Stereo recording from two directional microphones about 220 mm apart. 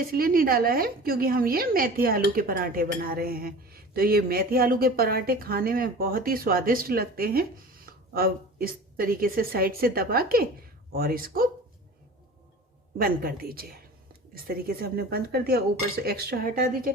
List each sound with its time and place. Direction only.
0.1 s a woman's voice: 40° right (ahead or behind)
13.0 s a woman's voice: 40° right (ahead or behind)